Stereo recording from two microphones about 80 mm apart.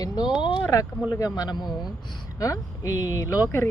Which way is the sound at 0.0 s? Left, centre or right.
Left.